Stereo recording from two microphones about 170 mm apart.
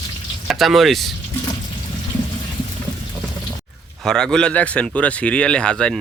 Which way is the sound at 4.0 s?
5° left (ahead or behind).